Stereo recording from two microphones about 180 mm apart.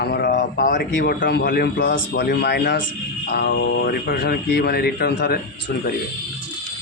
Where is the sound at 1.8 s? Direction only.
80° left; by 5.4 s 55° left (ahead or behind).